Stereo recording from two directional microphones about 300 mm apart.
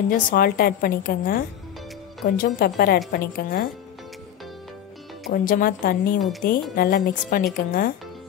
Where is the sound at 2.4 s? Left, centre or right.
Left.